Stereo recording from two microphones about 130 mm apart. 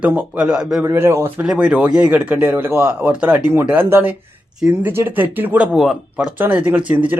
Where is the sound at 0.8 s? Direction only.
15° right (ahead or behind).